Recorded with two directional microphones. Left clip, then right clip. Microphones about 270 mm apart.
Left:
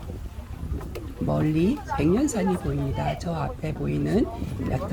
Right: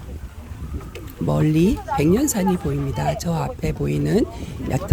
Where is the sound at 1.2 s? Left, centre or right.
Right.